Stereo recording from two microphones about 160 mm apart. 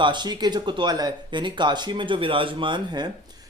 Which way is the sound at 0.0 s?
30° right (ahead or behind).